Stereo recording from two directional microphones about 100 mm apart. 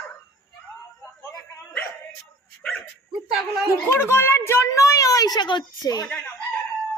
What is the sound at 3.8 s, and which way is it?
A child's voice, 25° left (ahead or behind).